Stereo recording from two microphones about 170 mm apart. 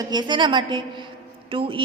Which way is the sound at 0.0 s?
25° right (ahead or behind).